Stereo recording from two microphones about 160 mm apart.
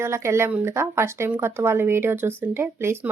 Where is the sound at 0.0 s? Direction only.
15° right (ahead or behind).